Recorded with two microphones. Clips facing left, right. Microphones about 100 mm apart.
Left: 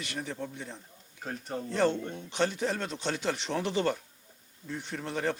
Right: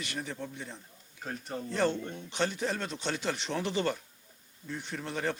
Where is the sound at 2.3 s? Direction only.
45° left (ahead or behind).